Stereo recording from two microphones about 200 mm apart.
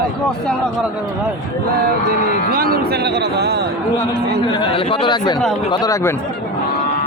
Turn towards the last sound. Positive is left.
turn(degrees=20)  # may be behind; listen again after turning